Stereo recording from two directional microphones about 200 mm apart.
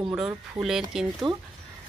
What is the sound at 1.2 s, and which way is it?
Speech, 25° right (ahead or behind).